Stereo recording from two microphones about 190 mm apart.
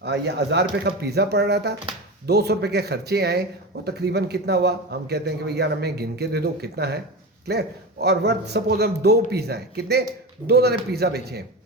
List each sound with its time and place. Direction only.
0.0 s a man's voice: 65° right (ahead or behind)